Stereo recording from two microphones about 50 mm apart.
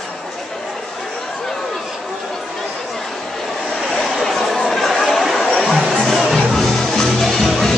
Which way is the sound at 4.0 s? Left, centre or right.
Centre.